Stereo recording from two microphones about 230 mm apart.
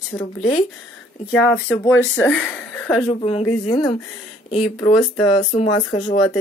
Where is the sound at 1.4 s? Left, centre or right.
Centre.